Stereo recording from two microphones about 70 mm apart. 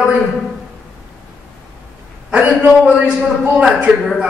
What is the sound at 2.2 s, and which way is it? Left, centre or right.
Speech, centre.